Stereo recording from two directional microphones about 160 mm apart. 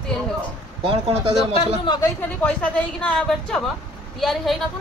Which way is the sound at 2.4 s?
5° left (ahead or behind).